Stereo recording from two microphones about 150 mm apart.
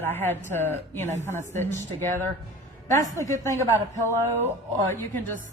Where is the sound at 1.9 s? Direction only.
15° left (ahead or behind).